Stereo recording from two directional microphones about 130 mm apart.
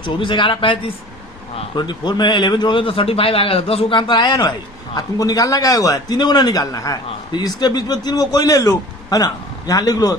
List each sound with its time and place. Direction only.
0.0 s a man's voice: 40° left (ahead or behind)